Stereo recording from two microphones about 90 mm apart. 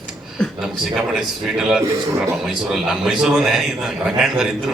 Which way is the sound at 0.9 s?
5° right (ahead or behind).